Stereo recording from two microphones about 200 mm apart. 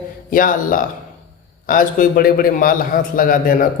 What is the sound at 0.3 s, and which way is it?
A man's voice, 45° left (ahead or behind).